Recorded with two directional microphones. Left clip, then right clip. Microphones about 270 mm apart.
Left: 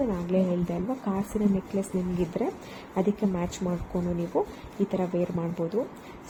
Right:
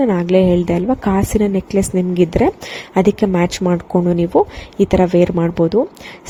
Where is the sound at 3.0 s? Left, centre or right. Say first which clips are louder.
Right 14 dB; right.